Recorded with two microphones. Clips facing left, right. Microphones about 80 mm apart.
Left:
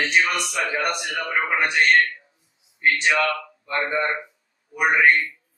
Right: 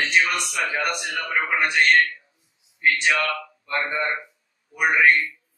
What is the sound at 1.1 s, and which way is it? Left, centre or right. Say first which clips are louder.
Speech: left 1 dB; centre.